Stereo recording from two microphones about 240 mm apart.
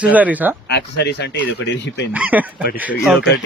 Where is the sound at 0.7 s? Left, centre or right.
Left.